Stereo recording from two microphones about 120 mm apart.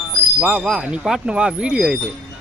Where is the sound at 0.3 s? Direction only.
10° right (ahead or behind).